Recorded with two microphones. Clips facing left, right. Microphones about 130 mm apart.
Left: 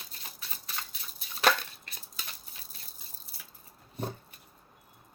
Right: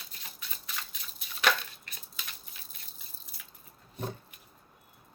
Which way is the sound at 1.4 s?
35° left (ahead or behind).